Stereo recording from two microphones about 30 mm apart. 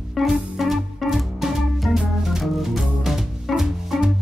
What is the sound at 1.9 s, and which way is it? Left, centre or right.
Music, centre.